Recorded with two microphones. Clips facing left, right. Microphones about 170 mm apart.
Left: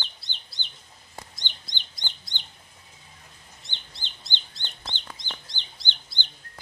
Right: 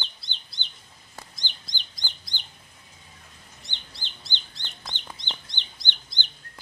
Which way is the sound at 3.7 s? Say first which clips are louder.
Even; 20° left (ahead or behind).